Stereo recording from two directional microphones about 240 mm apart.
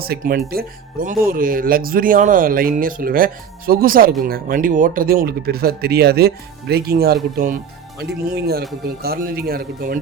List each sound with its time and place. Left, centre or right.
0.0 s speech: right